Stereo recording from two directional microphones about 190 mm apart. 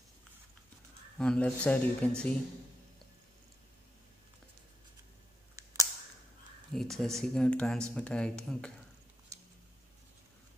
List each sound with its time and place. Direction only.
1.1 s speech: 5° left (ahead or behind)
6.7 s speech: centre (ahead or behind)